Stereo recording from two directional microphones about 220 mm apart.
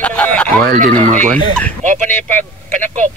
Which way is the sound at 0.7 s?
35° right (ahead or behind).